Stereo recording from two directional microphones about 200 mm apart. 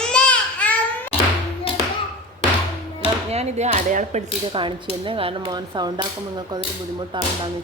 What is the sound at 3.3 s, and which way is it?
Speech, 30° right (ahead or behind).